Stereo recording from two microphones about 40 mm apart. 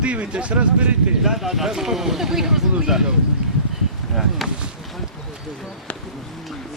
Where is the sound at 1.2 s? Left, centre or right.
Centre.